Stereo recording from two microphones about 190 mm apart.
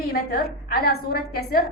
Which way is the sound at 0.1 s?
55° left (ahead or behind).